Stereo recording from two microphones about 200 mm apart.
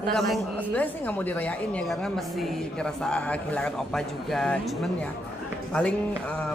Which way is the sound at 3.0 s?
5° left (ahead or behind).